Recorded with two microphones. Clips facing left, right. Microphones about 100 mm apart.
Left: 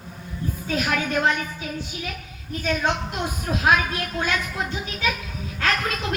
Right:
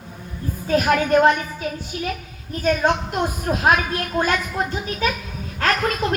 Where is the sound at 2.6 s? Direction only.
45° right (ahead or behind).